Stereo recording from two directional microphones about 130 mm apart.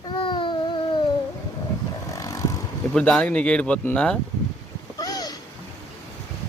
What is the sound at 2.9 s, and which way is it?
Speech, 5° left (ahead or behind).